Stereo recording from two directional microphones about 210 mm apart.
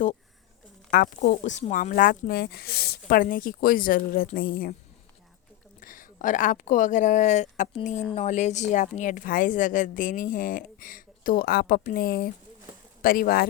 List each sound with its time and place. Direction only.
0.9 s speech: 45° left (ahead or behind)
5.8 s speech: 40° left (ahead or behind)